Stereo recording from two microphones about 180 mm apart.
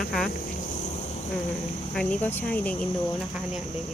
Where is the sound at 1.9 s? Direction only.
5° left (ahead or behind).